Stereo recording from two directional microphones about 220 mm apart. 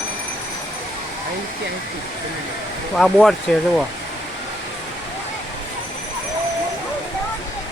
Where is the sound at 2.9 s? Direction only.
Centre (ahead or behind).